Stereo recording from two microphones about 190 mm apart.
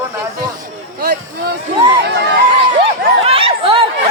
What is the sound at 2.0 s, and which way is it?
Chatter, 60° right (ahead or behind).